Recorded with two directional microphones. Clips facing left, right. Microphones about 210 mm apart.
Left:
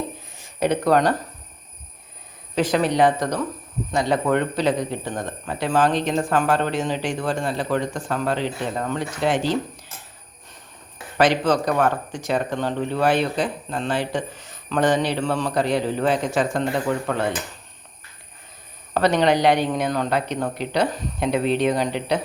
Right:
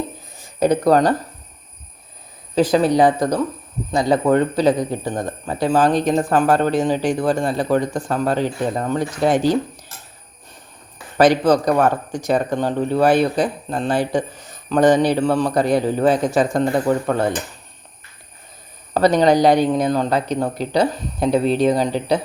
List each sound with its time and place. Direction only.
0.6 s speech: 40° right (ahead or behind)
2.6 s speech: 35° right (ahead or behind)
3.9 s speech: 35° right (ahead or behind)
11.2 s speech: 40° right (ahead or behind)
18.9 s speech: 40° right (ahead or behind)